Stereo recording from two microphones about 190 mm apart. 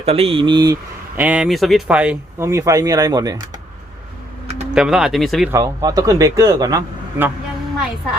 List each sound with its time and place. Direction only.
0.0 s speech: 30° right (ahead or behind)
1.1 s speech: 10° right (ahead or behind)
4.7 s speech: 5° right (ahead or behind)
5.5 s speech: 15° right (ahead or behind)